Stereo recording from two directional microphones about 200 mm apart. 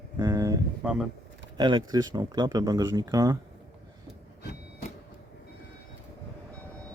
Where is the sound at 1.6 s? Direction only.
20° right (ahead or behind).